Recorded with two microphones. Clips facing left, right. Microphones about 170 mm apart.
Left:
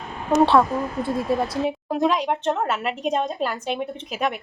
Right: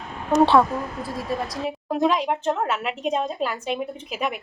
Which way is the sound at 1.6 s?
Centre (ahead or behind).